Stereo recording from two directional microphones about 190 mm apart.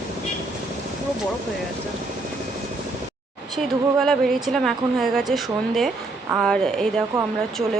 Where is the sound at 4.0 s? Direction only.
Centre (ahead or behind).